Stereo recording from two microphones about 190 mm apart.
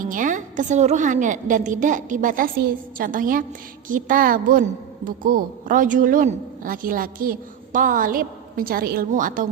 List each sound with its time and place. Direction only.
0.0 s a woman's voice: 45° right (ahead or behind)